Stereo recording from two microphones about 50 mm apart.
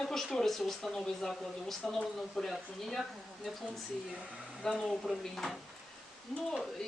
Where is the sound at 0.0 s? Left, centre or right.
Centre.